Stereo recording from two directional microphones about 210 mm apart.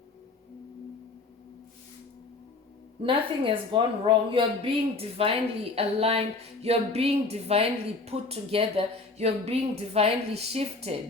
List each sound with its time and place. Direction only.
3.0 s speech: 25° right (ahead or behind)